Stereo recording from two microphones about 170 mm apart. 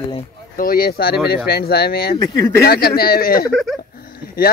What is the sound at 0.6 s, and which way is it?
Speech, 55° left (ahead or behind).